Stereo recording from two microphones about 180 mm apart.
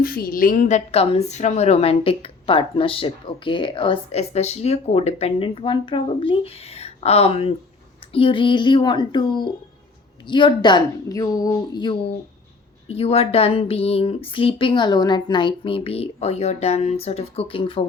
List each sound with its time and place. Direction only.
0.0 s a woman's voice: 55° left (ahead or behind); by 17.8 s 30° left (ahead or behind)